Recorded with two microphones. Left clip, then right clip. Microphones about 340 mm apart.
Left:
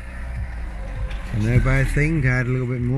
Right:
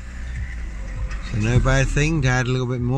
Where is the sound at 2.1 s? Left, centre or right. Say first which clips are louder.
Right 1 dB; right.